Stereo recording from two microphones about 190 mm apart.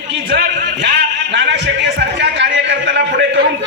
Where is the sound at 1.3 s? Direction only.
65° right (ahead or behind).